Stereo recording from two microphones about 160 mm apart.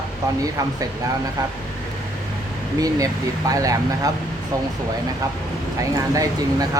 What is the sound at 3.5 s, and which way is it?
Speech, 20° right (ahead or behind).